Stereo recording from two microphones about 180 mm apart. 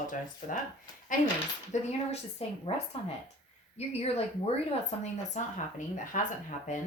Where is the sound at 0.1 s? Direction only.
45° left (ahead or behind).